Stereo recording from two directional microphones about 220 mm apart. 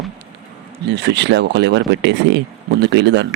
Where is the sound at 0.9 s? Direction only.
50° right (ahead or behind).